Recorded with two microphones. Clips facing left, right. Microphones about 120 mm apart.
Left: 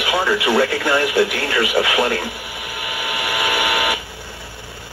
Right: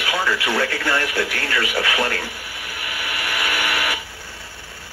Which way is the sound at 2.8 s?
15° left (ahead or behind).